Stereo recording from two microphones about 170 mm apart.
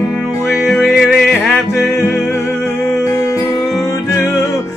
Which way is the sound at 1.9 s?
15° left (ahead or behind).